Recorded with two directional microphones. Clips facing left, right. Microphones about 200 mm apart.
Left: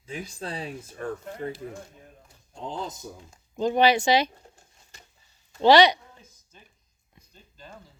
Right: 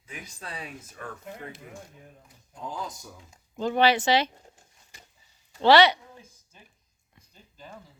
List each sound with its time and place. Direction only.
0.0 s a man's voice: 30° left (ahead or behind); by 4.3 s 15° left (ahead or behind)
5.5 s speech: 15° left (ahead or behind)